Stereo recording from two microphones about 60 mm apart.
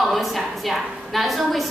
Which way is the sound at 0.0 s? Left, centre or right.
Centre.